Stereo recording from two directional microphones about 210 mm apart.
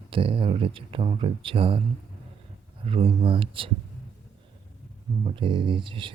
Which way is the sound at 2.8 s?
25° right (ahead or behind).